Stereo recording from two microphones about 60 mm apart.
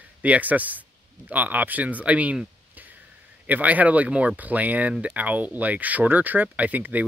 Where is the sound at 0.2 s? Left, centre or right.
Right.